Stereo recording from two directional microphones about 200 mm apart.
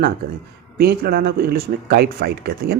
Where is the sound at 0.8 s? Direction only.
50° right (ahead or behind).